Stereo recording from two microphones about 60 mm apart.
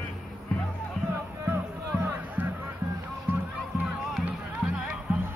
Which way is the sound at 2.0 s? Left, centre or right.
Right.